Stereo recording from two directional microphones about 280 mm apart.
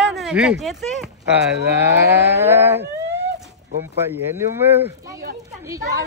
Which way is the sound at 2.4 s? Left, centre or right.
Centre.